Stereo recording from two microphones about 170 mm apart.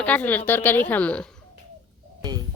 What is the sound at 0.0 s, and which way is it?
A woman's voice, 10° left (ahead or behind).